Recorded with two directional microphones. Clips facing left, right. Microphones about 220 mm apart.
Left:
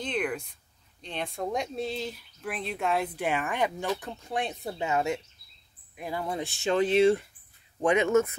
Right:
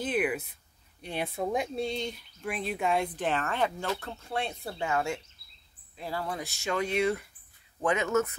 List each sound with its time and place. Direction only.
0.0 s a sound: 5° right (ahead or behind)
1.0 s speech: 10° right (ahead or behind); by 7.2 s 30° left (ahead or behind)
7.8 s speech: 15° left (ahead or behind)